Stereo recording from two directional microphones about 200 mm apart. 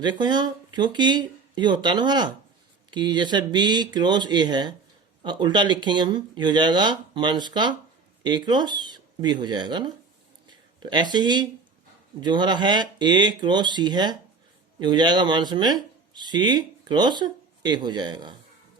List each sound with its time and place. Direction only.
0.0 s speech: 20° right (ahead or behind)
10.4 s a sound: 20° right (ahead or behind)
12.2 s speech: 20° right (ahead or behind)